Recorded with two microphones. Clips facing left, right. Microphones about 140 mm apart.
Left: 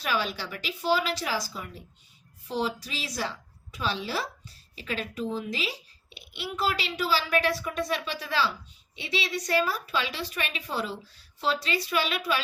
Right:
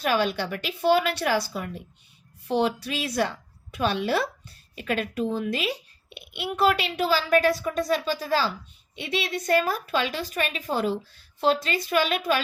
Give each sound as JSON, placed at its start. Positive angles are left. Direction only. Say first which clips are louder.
{"t": 0.0, "sound": "a child's voice", "louder": "right 6 dB", "side_deg": -50}